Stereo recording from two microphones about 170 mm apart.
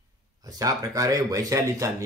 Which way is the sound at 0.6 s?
20° right (ahead or behind).